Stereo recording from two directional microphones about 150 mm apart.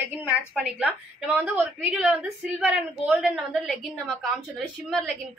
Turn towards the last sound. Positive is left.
turn(degrees=0)  # may be behind; listen again after turning